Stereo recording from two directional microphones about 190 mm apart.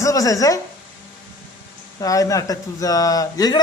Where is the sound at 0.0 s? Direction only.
15° left (ahead or behind).